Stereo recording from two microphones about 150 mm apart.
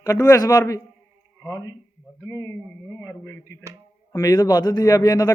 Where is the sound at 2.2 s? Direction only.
20° left (ahead or behind).